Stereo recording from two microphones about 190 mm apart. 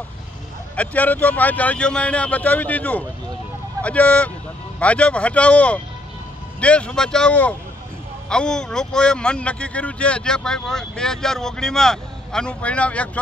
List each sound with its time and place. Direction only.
0.7 s a man's voice: 10° left (ahead or behind)